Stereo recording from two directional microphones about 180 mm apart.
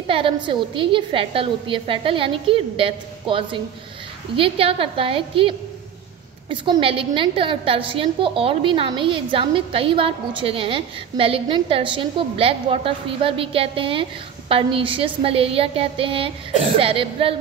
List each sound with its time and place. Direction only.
0.0 s a woman's voice: 30° right (ahead or behind)